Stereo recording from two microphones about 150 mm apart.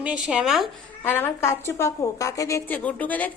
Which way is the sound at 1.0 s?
15° left (ahead or behind).